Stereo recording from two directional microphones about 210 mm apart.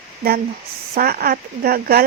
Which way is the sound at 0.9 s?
45° right (ahead or behind).